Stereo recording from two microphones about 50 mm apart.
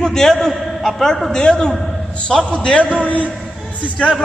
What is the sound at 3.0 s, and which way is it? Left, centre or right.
Speech, left.